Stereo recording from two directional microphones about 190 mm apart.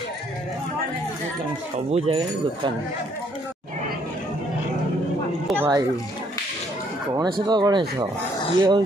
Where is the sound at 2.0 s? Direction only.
25° right (ahead or behind).